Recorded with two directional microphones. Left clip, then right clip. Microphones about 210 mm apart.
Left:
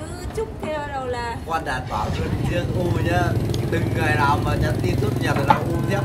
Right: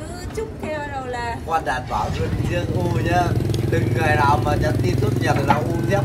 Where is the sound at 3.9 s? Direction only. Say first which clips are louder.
Right 2 dB; centre (ahead or behind).